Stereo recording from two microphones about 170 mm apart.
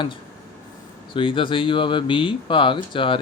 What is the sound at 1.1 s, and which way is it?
Speech, 30° left (ahead or behind).